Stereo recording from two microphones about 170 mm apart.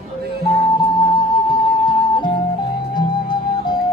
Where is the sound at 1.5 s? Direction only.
25° left (ahead or behind).